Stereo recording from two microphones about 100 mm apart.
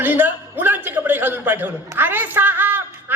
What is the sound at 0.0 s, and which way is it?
A man's voice, 20° right (ahead or behind).